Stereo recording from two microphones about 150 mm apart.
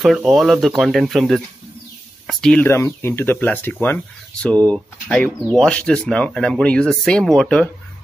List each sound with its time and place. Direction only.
0.0 s speech: 5° right (ahead or behind)
2.7 s speech: 15° left (ahead or behind)